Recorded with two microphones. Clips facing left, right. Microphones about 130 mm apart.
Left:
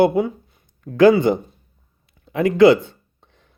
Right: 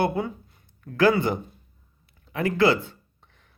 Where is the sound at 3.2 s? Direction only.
20° left (ahead or behind).